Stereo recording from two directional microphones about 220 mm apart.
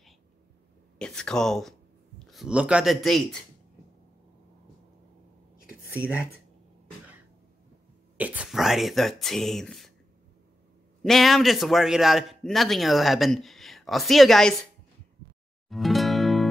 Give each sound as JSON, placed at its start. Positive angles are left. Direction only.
{"t": 0.9, "sound": "speech", "side_deg": 5}
{"t": 5.7, "sound": "a sound", "side_deg": -5}
{"t": 8.2, "sound": "speech", "side_deg": -5}
{"t": 11.0, "sound": "a man's voice", "side_deg": 0}
{"t": 15.7, "sound": "music", "side_deg": 0}